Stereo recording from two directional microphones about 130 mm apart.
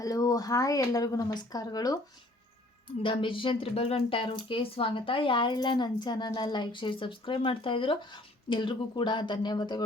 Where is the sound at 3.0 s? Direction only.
40° left (ahead or behind).